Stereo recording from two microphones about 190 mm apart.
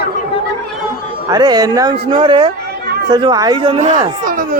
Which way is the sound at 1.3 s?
20° right (ahead or behind).